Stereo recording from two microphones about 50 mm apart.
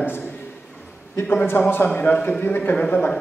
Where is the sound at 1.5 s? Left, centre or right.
Left.